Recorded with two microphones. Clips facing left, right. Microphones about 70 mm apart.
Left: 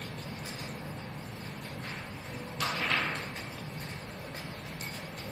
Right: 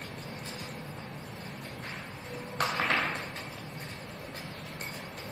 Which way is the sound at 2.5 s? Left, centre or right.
Right.